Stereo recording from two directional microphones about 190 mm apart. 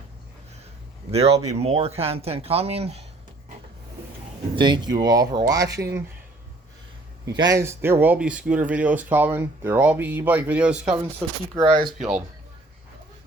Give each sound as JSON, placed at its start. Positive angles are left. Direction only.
{"t": 1.1, "sound": "speech", "side_deg": -30}
{"t": 4.5, "sound": "speech", "side_deg": -25}
{"t": 5.6, "sound": "speech", "side_deg": -60}
{"t": 7.3, "sound": "speech", "side_deg": -20}
{"t": 11.5, "sound": "speech", "side_deg": -20}